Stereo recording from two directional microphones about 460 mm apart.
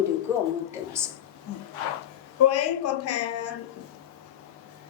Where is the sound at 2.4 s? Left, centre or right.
Left.